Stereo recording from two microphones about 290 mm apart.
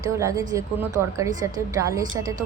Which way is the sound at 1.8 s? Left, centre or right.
Centre.